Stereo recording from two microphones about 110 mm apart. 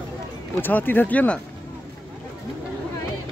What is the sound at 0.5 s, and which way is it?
Speech, 20° left (ahead or behind).